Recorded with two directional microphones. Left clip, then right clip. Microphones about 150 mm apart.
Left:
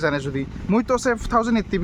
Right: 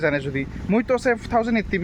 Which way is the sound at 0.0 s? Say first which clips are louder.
Right 1 dB; 25° left (ahead or behind).